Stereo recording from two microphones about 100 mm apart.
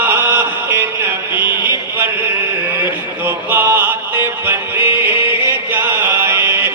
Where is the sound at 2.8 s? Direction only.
20° right (ahead or behind).